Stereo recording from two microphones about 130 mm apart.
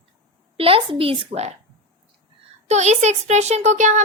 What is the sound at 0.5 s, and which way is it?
A woman's voice, 45° right (ahead or behind).